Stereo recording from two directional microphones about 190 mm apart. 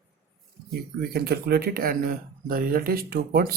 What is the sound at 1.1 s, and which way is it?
Speech, 55° right (ahead or behind).